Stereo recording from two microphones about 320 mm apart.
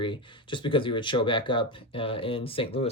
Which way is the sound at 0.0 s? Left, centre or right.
Centre.